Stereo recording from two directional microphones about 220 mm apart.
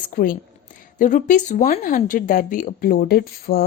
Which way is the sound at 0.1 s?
40° left (ahead or behind).